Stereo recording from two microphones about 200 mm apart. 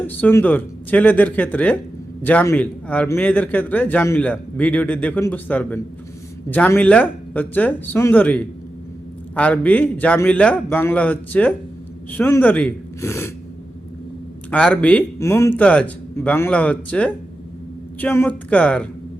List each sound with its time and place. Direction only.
0.0 s a man's voice: 10° left (ahead or behind)
14.5 s a man's voice: 5° left (ahead or behind)